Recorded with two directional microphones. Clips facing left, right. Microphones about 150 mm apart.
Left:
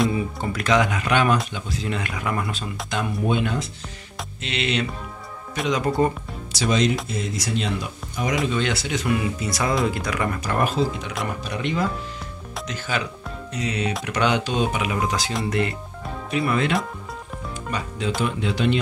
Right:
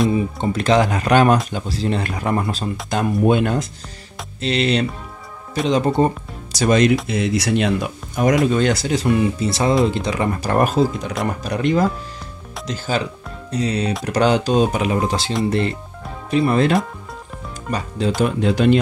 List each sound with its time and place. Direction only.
0.4 s speech: 25° right (ahead or behind)
3.3 s speech: 50° right (ahead or behind)
4.4 s speech: 35° right (ahead or behind)
5.7 s speech: 25° right (ahead or behind)
6.5 s speech: 50° right (ahead or behind)
7.1 s speech: 75° right (ahead or behind); by 8.4 s 55° right (ahead or behind)
8.5 s speech: 45° right (ahead or behind)